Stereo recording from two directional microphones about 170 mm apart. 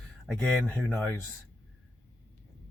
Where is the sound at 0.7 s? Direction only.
10° left (ahead or behind).